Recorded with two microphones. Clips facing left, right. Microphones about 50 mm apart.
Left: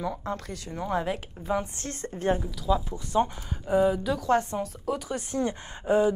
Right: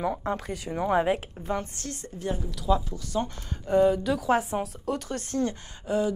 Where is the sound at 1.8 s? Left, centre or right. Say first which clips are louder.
Left 3 dB; left.